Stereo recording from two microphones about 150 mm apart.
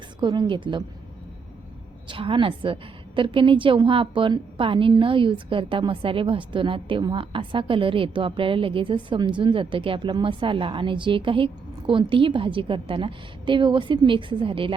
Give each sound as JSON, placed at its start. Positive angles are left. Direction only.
{"t": 0.2, "sound": "a woman's voice", "side_deg": -30}
{"t": 2.0, "sound": "a woman's voice", "side_deg": -35}